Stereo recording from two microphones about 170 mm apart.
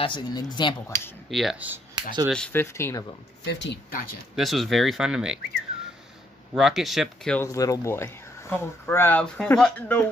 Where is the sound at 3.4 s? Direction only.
90° left.